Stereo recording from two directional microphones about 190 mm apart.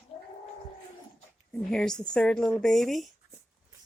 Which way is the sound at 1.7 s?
Centre (ahead or behind).